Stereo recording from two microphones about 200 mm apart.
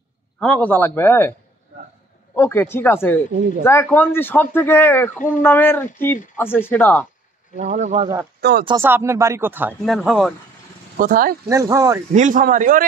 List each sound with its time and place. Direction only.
0.4 s speech: 5° left (ahead or behind)
2.3 s speech: 10° left (ahead or behind)
7.5 s a man's voice: 35° right (ahead or behind)
8.4 s speech: 55° right (ahead or behind)
8.8 s speech: 10° right (ahead or behind)
11.0 s speech: 45° right (ahead or behind)
11.4 s speech: 15° right (ahead or behind)
12.1 s a man's voice: 40° right (ahead or behind)